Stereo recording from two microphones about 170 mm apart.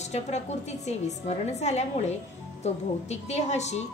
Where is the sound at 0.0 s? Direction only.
40° left (ahead or behind).